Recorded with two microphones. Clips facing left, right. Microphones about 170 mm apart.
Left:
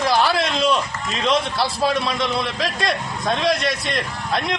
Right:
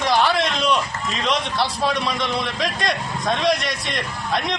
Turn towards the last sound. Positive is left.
turn(degrees=0)  # may be behind; listen again after turning